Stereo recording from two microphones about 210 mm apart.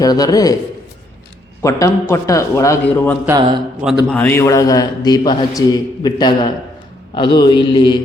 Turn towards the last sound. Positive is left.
turn(degrees=20)  # may be behind; listen again after turning